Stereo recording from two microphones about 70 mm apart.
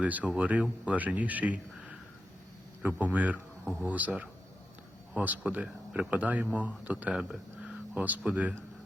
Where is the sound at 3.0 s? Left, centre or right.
Right.